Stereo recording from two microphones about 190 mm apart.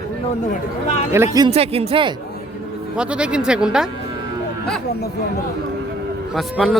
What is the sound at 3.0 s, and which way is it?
Speech, 5° right (ahead or behind).